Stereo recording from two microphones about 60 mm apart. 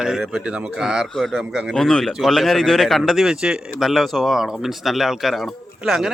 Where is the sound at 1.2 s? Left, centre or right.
Centre.